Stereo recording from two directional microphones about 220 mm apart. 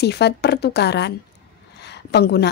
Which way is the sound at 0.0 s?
50° left (ahead or behind).